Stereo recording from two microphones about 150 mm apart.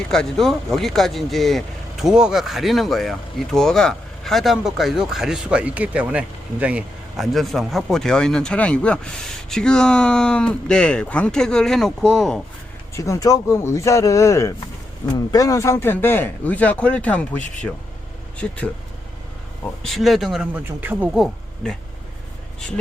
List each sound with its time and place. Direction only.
0.1 s speech: 5° left (ahead or behind)
12.9 s speech: 20° left (ahead or behind)
19.8 s speech: centre (ahead or behind)